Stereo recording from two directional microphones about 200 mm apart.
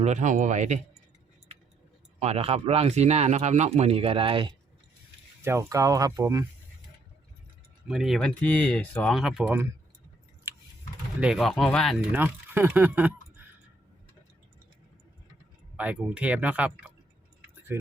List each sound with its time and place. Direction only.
0.0 s speech: 35° right (ahead or behind)
2.1 s speech: 30° right (ahead or behind)
5.4 s speech: 15° right (ahead or behind)
7.9 s speech: centre (ahead or behind)
11.2 s speech: centre (ahead or behind)
12.1 s speech: 10° right (ahead or behind)
15.8 s speech: 5° right (ahead or behind)